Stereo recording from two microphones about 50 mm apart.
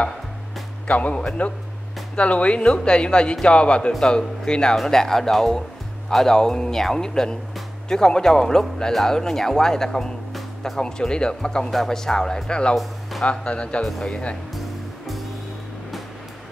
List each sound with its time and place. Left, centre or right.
0.8 s speech: left